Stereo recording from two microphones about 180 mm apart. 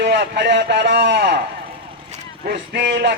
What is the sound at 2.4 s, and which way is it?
Speech, 65° right (ahead or behind).